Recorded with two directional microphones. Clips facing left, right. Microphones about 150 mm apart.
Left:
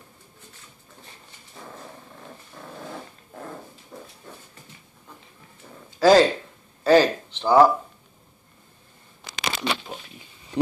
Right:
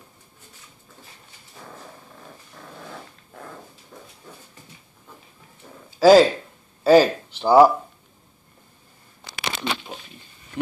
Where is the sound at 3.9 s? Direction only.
5° left (ahead or behind).